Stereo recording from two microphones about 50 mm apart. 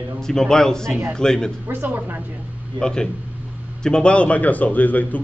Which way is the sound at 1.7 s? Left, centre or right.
Right.